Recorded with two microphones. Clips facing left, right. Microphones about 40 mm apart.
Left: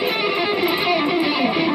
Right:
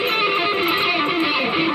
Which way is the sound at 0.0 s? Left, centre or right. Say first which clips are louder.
Right 1 dB; right.